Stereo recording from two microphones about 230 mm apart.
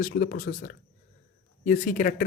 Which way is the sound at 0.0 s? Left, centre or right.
Left.